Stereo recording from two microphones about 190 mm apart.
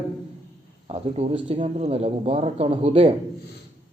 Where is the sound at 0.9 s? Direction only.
30° right (ahead or behind).